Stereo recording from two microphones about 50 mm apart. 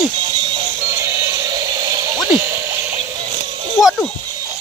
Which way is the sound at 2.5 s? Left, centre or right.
Right.